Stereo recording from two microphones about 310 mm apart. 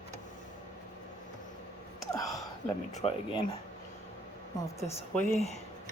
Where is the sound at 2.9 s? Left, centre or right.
Centre.